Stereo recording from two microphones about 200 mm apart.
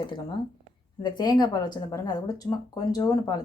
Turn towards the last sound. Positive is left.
turn(degrees=20)  # may be behind; listen again after turning